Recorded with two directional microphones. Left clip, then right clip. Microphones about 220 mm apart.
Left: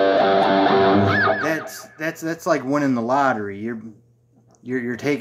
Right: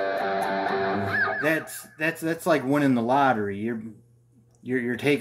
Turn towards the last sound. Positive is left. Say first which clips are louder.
# left 1 dB
turn(degrees=0)  # may be behind; listen again after turning